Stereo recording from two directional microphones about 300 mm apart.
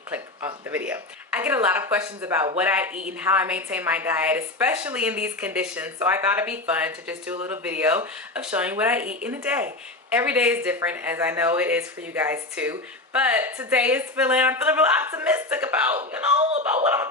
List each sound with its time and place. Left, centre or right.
0.1 s a woman's voice: centre
16.0 s speech: right
16.8 s a woman's voice: centre